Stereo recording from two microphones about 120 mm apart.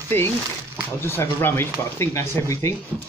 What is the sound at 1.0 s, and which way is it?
Speech, 20° left (ahead or behind).